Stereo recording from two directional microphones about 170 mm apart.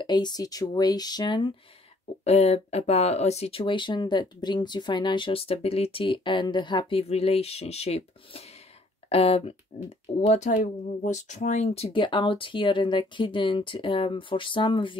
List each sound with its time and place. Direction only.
0.0 s speech: 25° left (ahead or behind)
2.2 s speech: 40° left (ahead or behind)